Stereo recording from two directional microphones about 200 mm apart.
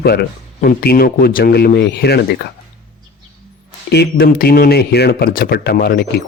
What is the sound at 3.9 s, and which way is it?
Speech, 50° left (ahead or behind).